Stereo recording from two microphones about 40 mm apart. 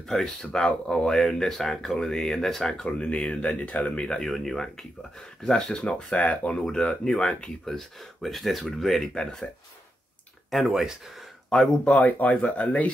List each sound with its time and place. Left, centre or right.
0.1 s speech: centre
2.9 s speech: left
4.3 s speech: centre
5.8 s speech: left
6.7 s speech: centre
7.6 s speech: centre
9.1 s speech: centre
11.5 s speech: centre
12.0 s speech: left